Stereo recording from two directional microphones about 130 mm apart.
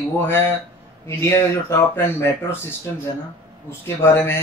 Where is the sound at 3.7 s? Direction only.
20° left (ahead or behind).